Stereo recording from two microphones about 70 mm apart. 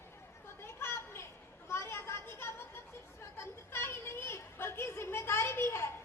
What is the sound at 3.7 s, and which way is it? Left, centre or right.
Children playing, left.